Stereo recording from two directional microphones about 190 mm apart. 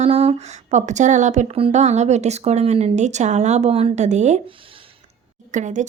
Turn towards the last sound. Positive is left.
turn(degrees=-40)  # may be behind; listen again after turning